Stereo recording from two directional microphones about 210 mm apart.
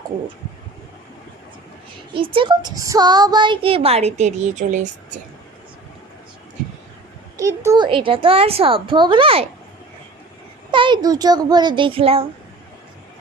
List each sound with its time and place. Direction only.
2.1 s speech: 25° right (ahead or behind)
7.3 s speech: 15° right (ahead or behind)
10.7 s a child's voice: 20° right (ahead or behind)